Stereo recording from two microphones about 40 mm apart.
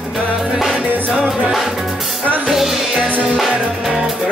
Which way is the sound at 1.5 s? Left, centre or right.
Centre.